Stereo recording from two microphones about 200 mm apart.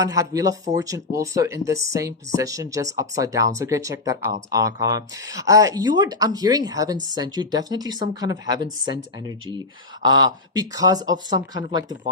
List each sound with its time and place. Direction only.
0.0 s speech: 15° right (ahead or behind)
10.0 s speech: 20° right (ahead or behind)